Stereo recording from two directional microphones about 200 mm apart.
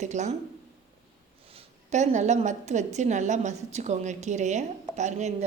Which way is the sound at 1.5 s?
35° right (ahead or behind).